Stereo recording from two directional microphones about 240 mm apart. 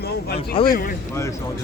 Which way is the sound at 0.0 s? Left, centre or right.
Left.